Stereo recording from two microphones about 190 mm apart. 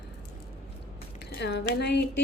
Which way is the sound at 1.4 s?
60° left (ahead or behind).